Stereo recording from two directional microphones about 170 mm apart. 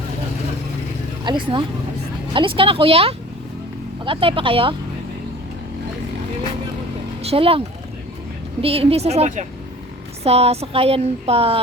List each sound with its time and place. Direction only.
1.2 s speech: 30° right (ahead or behind)
7.3 s speech: 35° right (ahead or behind)
8.6 s speech: 35° right (ahead or behind)